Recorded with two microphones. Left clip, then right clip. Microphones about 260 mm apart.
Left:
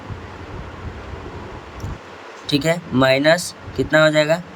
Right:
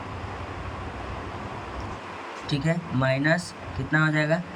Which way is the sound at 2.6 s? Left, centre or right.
Left.